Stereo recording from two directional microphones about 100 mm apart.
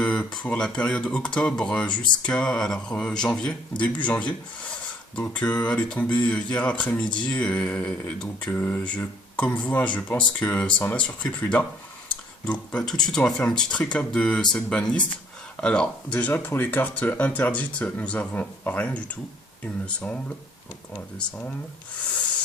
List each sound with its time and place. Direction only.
0.0 s speech: 10° left (ahead or behind)